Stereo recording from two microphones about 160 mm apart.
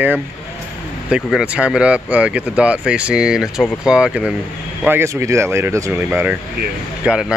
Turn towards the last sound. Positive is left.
turn(degrees=-5)  # may be behind; listen again after turning